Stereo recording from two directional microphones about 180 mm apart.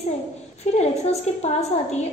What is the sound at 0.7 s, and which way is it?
Speech, 35° left (ahead or behind).